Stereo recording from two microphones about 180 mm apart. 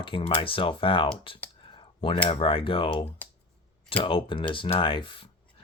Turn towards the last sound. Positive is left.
turn(degrees=30)  # may be behind; listen again after turning